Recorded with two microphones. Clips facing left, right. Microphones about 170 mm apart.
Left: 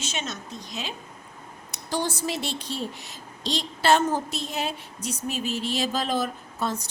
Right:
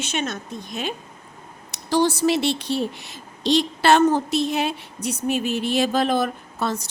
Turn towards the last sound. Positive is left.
turn(degrees=-75)  # may be behind; listen again after turning